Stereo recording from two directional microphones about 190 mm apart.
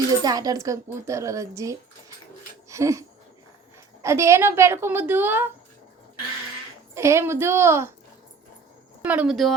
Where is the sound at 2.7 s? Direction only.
15° right (ahead or behind).